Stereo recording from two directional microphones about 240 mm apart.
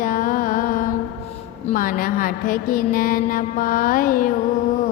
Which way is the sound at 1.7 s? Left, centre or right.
Left.